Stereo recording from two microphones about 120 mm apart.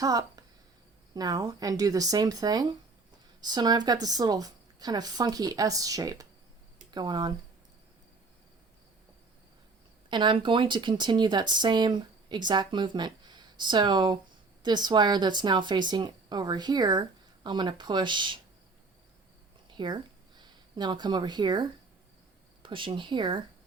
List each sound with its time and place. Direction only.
0.0 s a woman's voice: 30° right (ahead or behind)
10.1 s speech: 40° right (ahead or behind)
19.7 s speech: 40° right (ahead or behind)